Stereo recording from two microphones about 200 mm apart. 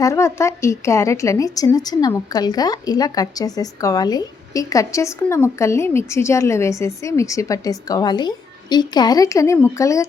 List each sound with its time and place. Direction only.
0.0 s a woman's voice: 15° left (ahead or behind)